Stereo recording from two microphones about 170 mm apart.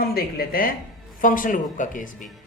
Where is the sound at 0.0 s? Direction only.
65° left (ahead or behind).